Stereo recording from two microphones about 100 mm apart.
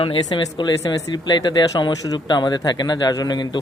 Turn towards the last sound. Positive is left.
turn(degrees=45)  # may be behind; listen again after turning